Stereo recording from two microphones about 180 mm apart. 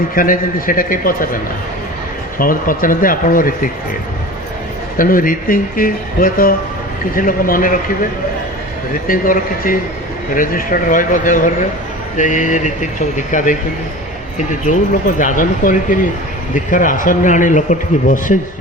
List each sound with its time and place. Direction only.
0.2 s speech: 50° left (ahead or behind)
2.4 s speech: 50° left (ahead or behind)
4.9 s speech: 50° left (ahead or behind)
9.0 s speech: 50° left (ahead or behind)